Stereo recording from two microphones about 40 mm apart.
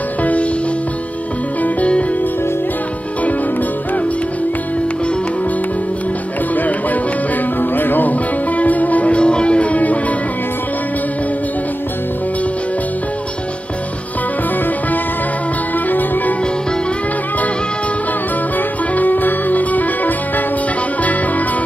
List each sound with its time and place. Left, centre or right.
0.2 s music: left
6.5 s music: left
15.9 s music: left
18.9 s music: left